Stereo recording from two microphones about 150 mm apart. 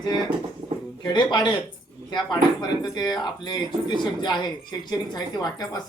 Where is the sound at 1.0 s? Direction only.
30° left (ahead or behind).